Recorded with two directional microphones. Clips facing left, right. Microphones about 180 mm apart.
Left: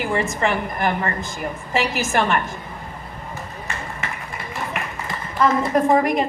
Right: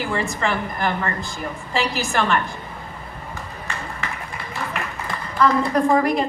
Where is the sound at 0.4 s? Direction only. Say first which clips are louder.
Left 2 dB; 15° left (ahead or behind).